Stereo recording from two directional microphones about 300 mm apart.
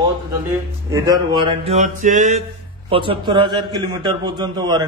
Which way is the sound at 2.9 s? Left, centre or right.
Centre.